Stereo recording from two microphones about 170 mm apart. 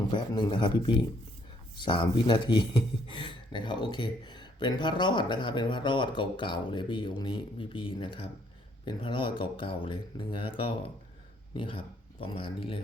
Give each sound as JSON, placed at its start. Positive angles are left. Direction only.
{"t": 0.1, "sound": "speech", "side_deg": 25}